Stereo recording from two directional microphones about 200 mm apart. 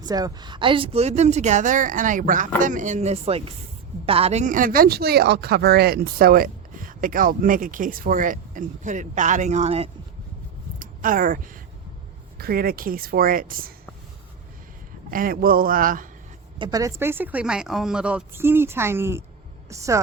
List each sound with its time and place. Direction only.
0.0 s a woman's voice: 20° right (ahead or behind)
10.8 s speech: 45° right (ahead or behind)
15.1 s speech: 45° right (ahead or behind)
16.6 s speech: 15° right (ahead or behind)